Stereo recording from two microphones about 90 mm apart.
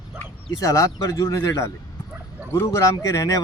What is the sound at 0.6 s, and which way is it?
Speech, 40° left (ahead or behind).